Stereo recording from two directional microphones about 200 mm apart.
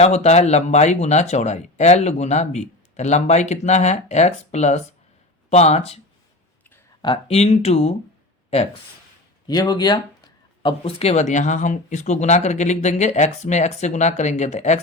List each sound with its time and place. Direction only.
0.0 s speech: 35° left (ahead or behind)
7.0 s speech: 25° left (ahead or behind)
9.5 s speech: 20° left (ahead or behind); by 14.8 s 35° left (ahead or behind)